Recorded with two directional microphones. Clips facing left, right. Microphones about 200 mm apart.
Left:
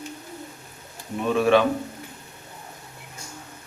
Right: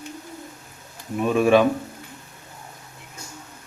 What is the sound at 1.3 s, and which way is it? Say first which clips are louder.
Speech: right 2 dB; 15° right (ahead or behind).